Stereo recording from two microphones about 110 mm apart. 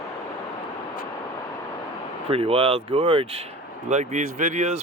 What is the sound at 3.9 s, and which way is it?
Speech, 90° right.